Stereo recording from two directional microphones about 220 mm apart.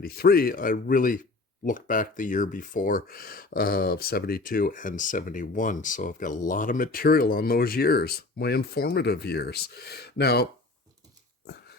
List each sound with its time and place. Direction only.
0.0 s speech: 45° left (ahead or behind)